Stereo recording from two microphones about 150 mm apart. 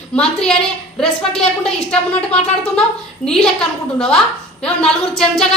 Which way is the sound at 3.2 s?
5° left (ahead or behind).